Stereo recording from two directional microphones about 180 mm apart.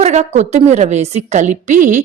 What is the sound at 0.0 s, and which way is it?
A woman's voice, 40° right (ahead or behind).